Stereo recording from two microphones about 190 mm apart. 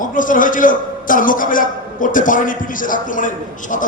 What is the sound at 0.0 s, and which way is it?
A man's voice, 45° left (ahead or behind).